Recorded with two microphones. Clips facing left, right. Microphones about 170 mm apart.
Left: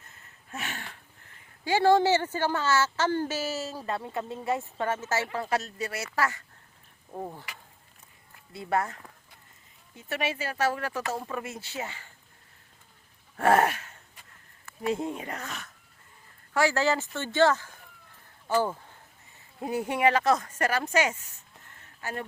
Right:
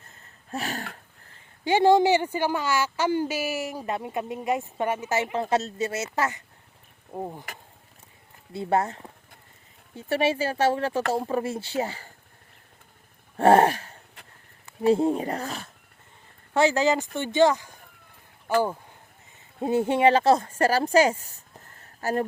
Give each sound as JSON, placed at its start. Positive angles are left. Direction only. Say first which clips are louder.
{"t": 0.5, "sound": "dog", "louder": "right 7 dB", "side_deg": -35}
{"t": 1.6, "sound": "speech", "louder": "right 3 dB", "side_deg": -20}
{"t": 8.5, "sound": "speech", "louder": "right 4 dB", "side_deg": -25}
{"t": 13.3, "sound": "a sound", "louder": "right 5 dB", "side_deg": -30}
{"t": 14.8, "sound": "speech", "louder": "right 9 dB", "side_deg": -30}
{"t": 16.6, "sound": "speech", "louder": "right 4 dB", "side_deg": -20}
{"t": 18.4, "sound": "a sound", "louder": "right 3 dB", "side_deg": -15}
{"t": 19.5, "sound": "speech", "louder": "right 6 dB", "side_deg": -25}